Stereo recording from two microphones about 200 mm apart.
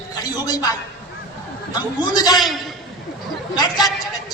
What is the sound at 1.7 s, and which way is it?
Speech, 20° left (ahead or behind).